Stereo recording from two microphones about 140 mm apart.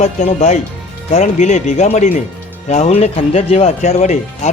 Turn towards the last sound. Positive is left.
turn(degrees=55)  # may be behind; listen again after turning